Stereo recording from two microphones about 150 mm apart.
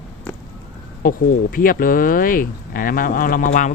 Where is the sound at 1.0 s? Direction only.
70° left (ahead or behind).